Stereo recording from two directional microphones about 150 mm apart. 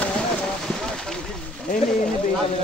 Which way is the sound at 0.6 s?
5° left (ahead or behind).